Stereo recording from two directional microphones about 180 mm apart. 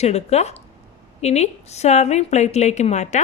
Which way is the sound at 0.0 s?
35° left (ahead or behind).